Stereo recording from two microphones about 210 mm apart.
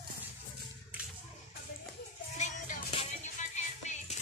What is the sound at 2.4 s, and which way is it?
Music, 35° left (ahead or behind).